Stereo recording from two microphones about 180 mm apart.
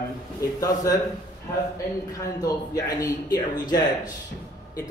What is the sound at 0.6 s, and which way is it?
Speech, 20° left (ahead or behind).